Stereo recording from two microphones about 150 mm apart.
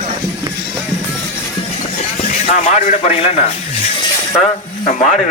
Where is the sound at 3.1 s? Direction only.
40° left (ahead or behind).